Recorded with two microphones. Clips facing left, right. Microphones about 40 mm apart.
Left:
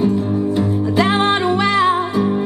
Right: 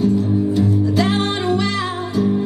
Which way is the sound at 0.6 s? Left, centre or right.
Left.